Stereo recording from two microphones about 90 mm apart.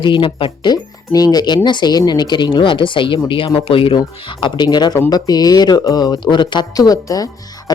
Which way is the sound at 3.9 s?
65° left (ahead or behind).